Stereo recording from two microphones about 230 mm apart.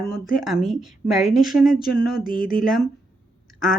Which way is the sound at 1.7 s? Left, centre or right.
Left.